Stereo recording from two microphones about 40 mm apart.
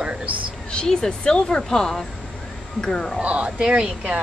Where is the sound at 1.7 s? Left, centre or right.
Centre.